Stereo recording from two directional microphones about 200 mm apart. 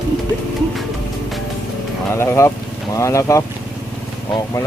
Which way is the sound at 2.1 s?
15° left (ahead or behind).